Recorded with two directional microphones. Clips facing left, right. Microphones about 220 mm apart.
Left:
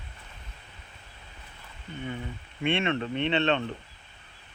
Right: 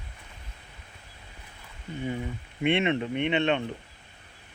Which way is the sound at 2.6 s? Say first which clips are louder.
Right 2 dB; 20° right (ahead or behind).